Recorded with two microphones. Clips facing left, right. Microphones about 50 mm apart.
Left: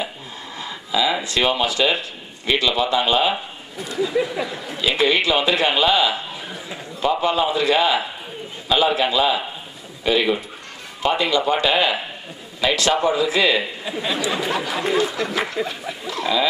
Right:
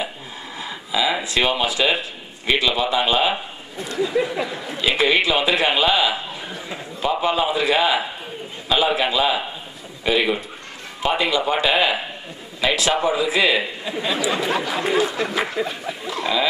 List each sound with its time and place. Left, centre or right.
0.6 s a man's voice: centre
4.0 s a man's voice: centre
13.8 s speech: centre